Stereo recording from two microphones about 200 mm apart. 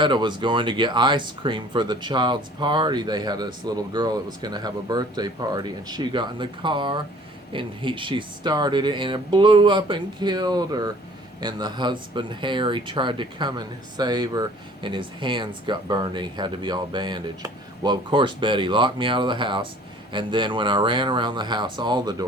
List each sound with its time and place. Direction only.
0.0 s speech: 20° right (ahead or behind)